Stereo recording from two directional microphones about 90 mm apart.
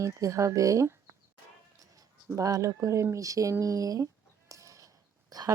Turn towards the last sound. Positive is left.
turn(degrees=-45)  # may be behind; listen again after turning